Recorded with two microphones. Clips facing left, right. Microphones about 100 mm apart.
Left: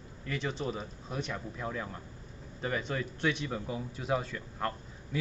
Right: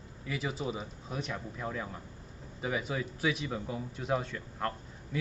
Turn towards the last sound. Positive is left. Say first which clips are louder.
# even
turn(degrees=0)  # may be behind; listen again after turning